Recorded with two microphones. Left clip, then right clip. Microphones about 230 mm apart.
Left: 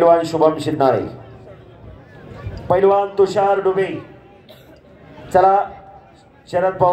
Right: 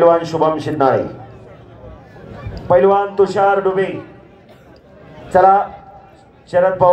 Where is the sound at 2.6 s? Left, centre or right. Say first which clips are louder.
Right 2 dB; left.